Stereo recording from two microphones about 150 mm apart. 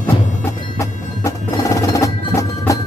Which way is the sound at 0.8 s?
20° left (ahead or behind).